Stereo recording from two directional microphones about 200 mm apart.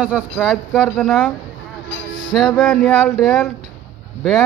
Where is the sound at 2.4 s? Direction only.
Centre (ahead or behind).